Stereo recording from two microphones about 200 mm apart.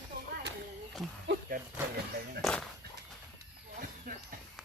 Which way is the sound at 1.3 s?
45° right (ahead or behind).